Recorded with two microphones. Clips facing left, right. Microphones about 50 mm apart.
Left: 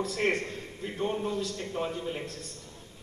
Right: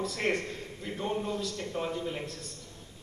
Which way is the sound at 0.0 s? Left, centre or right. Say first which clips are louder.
Left 2 dB; left.